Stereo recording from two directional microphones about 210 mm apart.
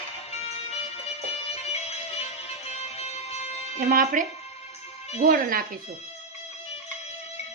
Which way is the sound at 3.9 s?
40° right (ahead or behind).